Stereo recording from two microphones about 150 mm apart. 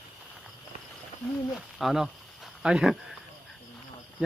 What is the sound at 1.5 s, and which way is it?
Speech, centre (ahead or behind).